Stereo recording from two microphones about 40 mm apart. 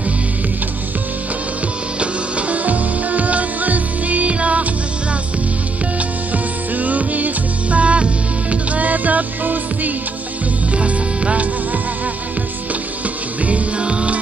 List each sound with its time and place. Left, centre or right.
2.0 s music: right
5.9 s music: right
10.7 s music: right
13.4 s music: right